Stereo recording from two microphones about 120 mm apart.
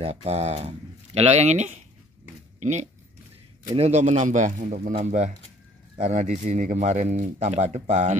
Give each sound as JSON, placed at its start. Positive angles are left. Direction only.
{"t": 0.0, "sound": "speech", "side_deg": -60}
{"t": 3.6, "sound": "speech", "side_deg": -65}